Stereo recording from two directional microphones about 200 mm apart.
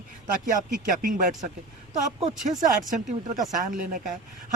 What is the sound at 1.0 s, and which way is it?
Speech, 40° right (ahead or behind).